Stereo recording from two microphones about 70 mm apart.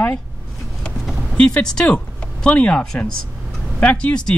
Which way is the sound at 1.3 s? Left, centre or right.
Centre.